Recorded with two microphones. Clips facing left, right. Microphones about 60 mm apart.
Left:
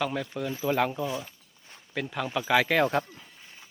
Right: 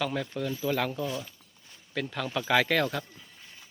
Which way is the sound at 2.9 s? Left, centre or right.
Left.